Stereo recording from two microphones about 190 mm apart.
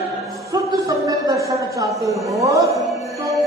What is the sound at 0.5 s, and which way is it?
Speech, 20° right (ahead or behind).